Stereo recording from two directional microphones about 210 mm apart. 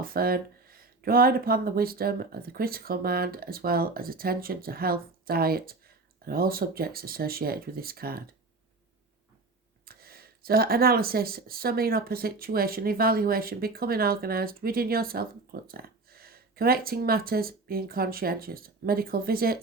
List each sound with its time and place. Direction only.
0.0 s speech: 45° right (ahead or behind)
9.8 s speech: 45° right (ahead or behind)